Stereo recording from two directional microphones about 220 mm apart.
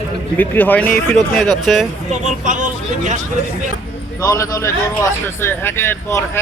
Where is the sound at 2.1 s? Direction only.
35° right (ahead or behind).